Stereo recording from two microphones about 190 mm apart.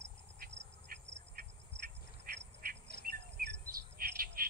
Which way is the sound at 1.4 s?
50° right (ahead or behind).